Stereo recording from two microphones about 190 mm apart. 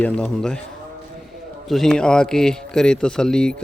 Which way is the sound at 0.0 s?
5° left (ahead or behind).